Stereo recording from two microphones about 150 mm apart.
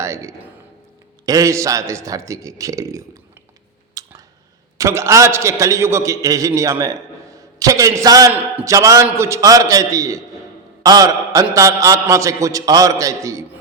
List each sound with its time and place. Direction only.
0.0 s a man's voice: 20° right (ahead or behind)
4.0 s a sound: 25° right (ahead or behind)
4.8 s a man's voice: 20° right (ahead or behind)